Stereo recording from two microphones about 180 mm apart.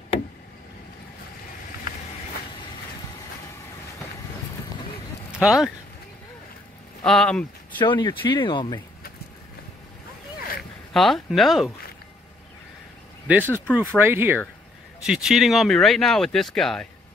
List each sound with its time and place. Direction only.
5.4 s speech: 5° right (ahead or behind)
7.0 s speech: 5° left (ahead or behind)
7.8 s speech: 25° left (ahead or behind)
10.9 s speech: centre (ahead or behind)
13.4 s speech: 10° left (ahead or behind)
13.7 s speech: 10° right (ahead or behind)